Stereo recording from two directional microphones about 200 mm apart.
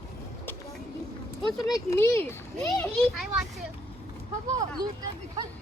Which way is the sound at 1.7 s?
15° left (ahead or behind).